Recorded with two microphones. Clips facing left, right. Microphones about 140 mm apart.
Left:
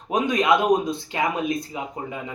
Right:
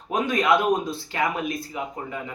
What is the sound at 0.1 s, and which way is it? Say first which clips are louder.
Speech: left 1 dB; 20° left (ahead or behind).